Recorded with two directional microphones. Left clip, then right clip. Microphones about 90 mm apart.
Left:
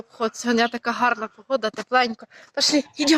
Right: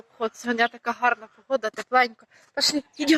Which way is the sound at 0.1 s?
40° left (ahead or behind).